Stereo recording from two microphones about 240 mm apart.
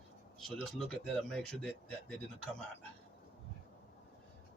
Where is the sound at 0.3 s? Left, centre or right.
Centre.